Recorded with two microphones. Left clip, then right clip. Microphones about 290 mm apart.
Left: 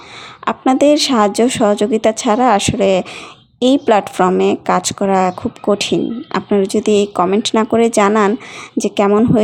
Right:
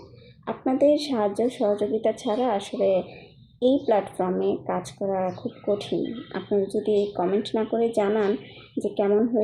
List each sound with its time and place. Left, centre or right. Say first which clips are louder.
0.4 s speech: left 9 dB; left